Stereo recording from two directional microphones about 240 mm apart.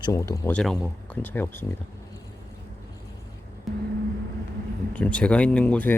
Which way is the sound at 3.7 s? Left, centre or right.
Centre.